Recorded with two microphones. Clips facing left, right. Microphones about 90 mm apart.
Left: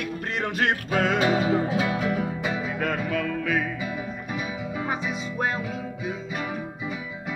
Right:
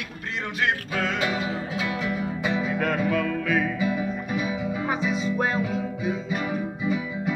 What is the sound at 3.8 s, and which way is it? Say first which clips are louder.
Music: right 6 dB; 20° left (ahead or behind).